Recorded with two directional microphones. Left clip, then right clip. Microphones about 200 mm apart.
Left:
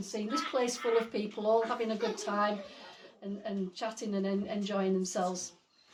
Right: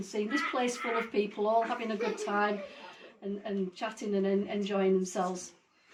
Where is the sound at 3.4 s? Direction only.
20° left (ahead or behind).